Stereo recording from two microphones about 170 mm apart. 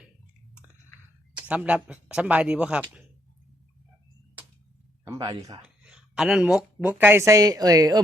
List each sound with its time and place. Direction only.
1.4 s speech: 10° right (ahead or behind)
5.0 s speech: 20° right (ahead or behind)
5.6 s a sound: 5° right (ahead or behind)
6.8 s speech: 10° right (ahead or behind)